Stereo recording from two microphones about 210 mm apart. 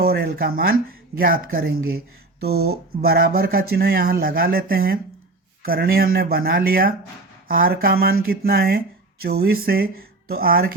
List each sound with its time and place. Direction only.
0.0 s speech: 50° right (ahead or behind)